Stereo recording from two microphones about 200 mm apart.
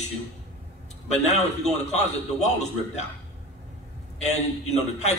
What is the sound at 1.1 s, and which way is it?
A man's voice, 35° left (ahead or behind).